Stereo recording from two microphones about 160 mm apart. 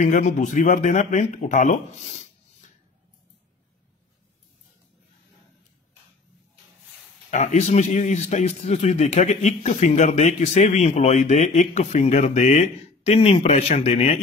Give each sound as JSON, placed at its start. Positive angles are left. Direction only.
{"t": 0.0, "sound": "a man's voice", "side_deg": 50}
{"t": 7.2, "sound": "a man's voice", "side_deg": 45}